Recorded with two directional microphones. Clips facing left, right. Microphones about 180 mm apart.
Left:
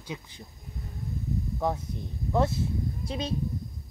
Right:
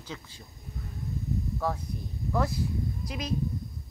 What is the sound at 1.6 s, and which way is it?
Speech, 20° left (ahead or behind).